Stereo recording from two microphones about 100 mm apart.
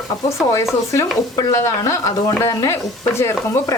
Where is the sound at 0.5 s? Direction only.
30° left (ahead or behind).